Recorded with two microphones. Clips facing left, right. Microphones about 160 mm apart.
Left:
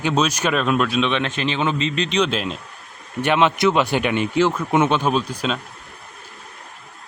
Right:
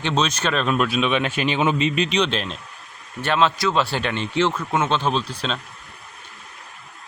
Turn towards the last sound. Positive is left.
turn(degrees=10)  # may be behind; listen again after turning